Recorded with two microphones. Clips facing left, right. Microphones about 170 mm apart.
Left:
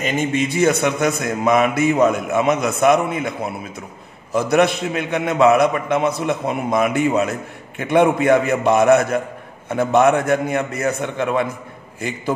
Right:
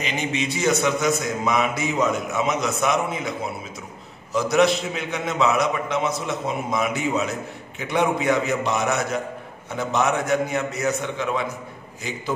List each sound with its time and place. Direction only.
0.0 s a man's voice: 50° left (ahead or behind)